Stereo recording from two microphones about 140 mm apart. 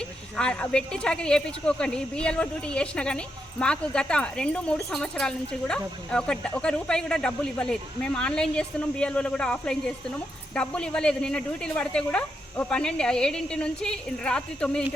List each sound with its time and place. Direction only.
0.3 s a woman's voice: 5° left (ahead or behind)